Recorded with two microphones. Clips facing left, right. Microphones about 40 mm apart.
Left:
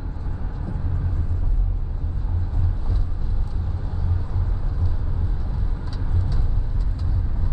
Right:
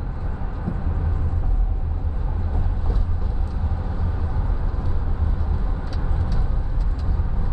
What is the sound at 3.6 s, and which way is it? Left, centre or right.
Vehicle, right.